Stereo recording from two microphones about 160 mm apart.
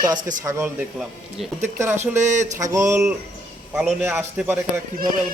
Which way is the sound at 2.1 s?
50° right (ahead or behind).